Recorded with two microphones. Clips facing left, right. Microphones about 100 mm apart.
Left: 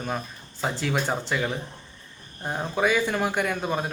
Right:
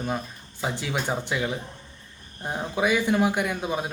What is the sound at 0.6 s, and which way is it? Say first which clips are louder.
Speech: left 2 dB; 15° right (ahead or behind).